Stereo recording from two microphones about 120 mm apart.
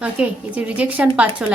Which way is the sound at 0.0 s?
10° right (ahead or behind).